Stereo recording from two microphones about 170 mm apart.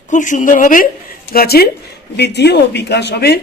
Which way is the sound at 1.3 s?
65° left (ahead or behind).